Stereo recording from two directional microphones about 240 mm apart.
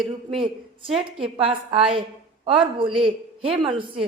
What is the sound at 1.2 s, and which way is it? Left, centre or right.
A woman's voice, right.